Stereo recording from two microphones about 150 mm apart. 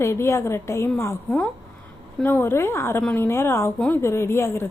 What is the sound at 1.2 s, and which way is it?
A woman's voice, 5° left (ahead or behind).